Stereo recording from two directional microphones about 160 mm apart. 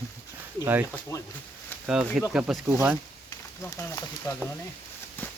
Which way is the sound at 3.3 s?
15° left (ahead or behind).